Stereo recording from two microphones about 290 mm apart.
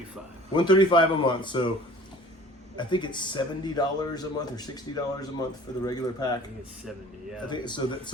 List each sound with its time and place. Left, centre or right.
0.5 s speech: centre
2.7 s speech: centre
7.5 s speech: centre